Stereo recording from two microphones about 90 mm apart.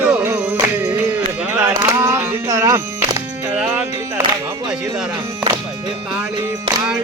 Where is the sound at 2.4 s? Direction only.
35° right (ahead or behind).